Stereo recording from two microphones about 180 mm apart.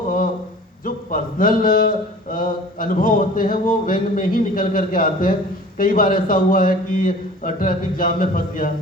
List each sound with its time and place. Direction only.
0.9 s speech: 50° left (ahead or behind)